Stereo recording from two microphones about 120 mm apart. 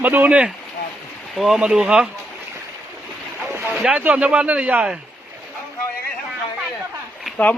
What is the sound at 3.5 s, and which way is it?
Boat, 20° right (ahead or behind).